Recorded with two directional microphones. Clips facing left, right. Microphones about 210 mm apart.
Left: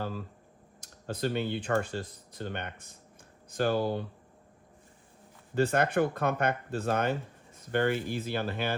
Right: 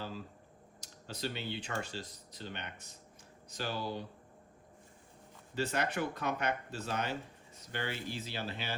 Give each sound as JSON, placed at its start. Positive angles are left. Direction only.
{"t": 0.8, "sound": "speech", "side_deg": 55}
{"t": 5.5, "sound": "speech", "side_deg": 50}